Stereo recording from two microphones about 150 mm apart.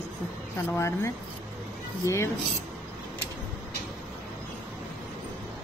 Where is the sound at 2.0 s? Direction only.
20° left (ahead or behind).